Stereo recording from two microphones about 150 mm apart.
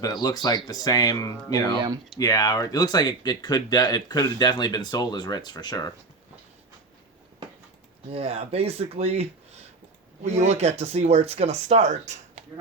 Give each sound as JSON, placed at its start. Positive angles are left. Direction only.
{"t": 0.0, "sound": "speech", "side_deg": 25}
{"t": 8.1, "sound": "speech", "side_deg": -40}
{"t": 10.2, "sound": "speech", "side_deg": -50}